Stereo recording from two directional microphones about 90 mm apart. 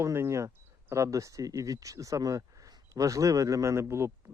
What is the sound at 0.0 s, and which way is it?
Speech, 30° right (ahead or behind).